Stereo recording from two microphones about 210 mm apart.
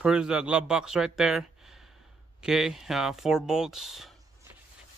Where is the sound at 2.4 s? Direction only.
Centre (ahead or behind).